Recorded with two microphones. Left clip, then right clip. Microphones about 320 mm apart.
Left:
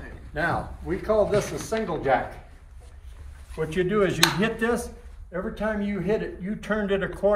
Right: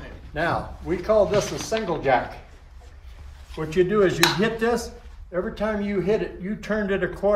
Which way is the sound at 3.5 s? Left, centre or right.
Centre.